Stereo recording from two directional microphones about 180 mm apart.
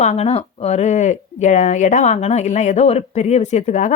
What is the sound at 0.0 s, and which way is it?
A woman's voice, 35° left (ahead or behind).